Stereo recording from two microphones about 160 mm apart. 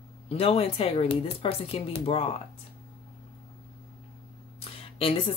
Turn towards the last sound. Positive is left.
turn(degrees=35)  # may be behind; listen again after turning